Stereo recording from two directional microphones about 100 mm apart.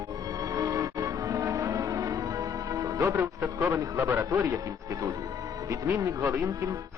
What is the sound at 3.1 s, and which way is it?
Speech, 20° right (ahead or behind).